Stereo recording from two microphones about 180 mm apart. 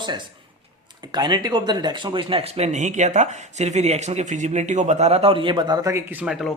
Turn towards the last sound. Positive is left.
turn(degrees=-5)  # may be behind; listen again after turning